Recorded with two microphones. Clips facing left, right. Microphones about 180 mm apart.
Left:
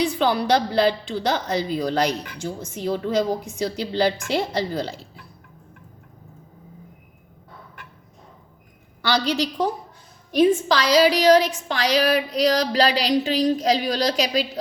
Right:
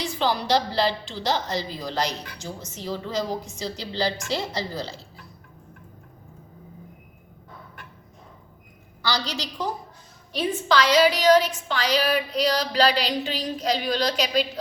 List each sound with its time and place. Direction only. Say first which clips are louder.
0.0 s a woman's voice: left 5 dB; 55° left (ahead or behind)
9.0 s a woman's voice: left 7 dB; 60° left (ahead or behind)
10.3 s a woman's voice: left 5 dB; 40° left (ahead or behind)